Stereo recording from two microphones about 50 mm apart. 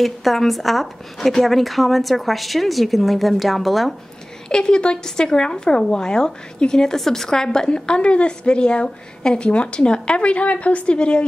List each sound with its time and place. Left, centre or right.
0.0 s speech: centre
4.5 s a woman's voice: centre